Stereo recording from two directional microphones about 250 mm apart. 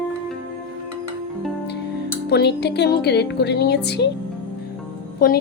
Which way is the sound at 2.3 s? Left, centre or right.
Left.